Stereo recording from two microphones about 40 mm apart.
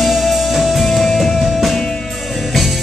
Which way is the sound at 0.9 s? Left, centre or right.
Centre.